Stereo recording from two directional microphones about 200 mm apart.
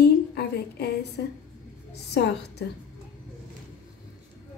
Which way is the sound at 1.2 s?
55° left (ahead or behind).